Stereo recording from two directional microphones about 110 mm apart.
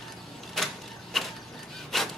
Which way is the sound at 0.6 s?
5° left (ahead or behind).